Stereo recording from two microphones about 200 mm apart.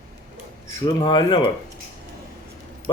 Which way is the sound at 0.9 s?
20° left (ahead or behind).